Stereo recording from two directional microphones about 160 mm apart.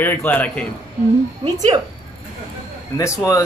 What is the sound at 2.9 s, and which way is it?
Speech, 20° left (ahead or behind).